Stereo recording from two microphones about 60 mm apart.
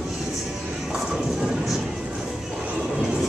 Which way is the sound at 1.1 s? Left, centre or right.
Centre.